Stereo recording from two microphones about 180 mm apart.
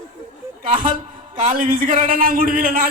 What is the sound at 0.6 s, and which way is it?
A man's voice, 50° right (ahead or behind).